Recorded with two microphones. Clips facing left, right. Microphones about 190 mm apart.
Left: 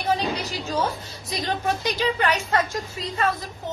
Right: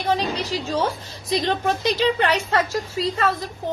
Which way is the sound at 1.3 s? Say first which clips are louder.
Right 4 dB; 30° right (ahead or behind).